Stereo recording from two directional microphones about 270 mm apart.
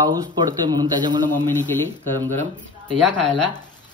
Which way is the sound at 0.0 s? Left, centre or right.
Centre.